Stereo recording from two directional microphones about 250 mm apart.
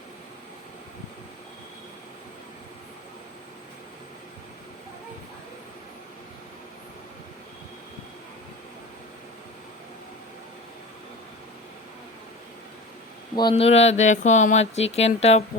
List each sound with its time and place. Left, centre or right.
13.3 s speech: centre